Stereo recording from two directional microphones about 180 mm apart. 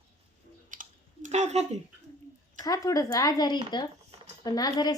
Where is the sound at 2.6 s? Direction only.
20° left (ahead or behind).